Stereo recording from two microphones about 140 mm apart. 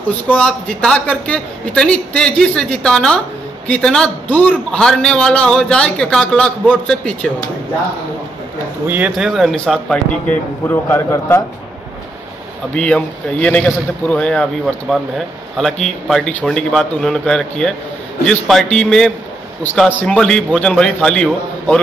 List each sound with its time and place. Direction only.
0.3 s a man's voice: 10° left (ahead or behind)
8.8 s speech: 15° right (ahead or behind)
9.1 s speech: centre (ahead or behind)
10.7 s a man's voice: 15° left (ahead or behind)
12.7 s a man's voice: 10° left (ahead or behind)